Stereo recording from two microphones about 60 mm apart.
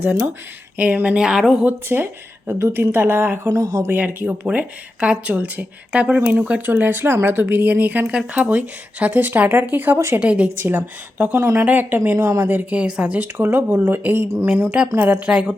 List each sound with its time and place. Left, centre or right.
0.0 s speech: right
1.9 s speech: right
2.5 s speech: right
3.5 s speech: right
3.8 s speech: right
10.6 s speech: right
12.7 s speech: centre; by 14.3 s right
14.8 s a woman's voice: right
15.3 s speech: centre